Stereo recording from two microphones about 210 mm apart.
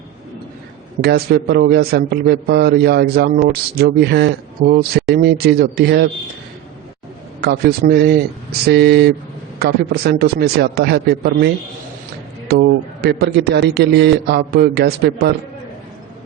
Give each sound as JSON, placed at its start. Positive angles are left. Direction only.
{"t": 1.0, "sound": "a man's voice", "side_deg": -50}
{"t": 7.4, "sound": "a man's voice", "side_deg": -50}